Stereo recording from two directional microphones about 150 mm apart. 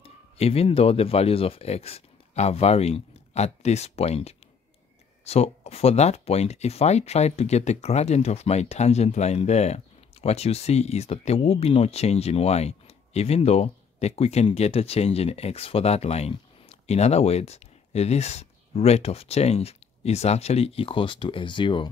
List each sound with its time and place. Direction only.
0.0 s speech: 40° left (ahead or behind)